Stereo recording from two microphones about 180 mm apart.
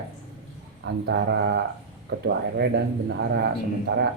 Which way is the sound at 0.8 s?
70° right (ahead or behind).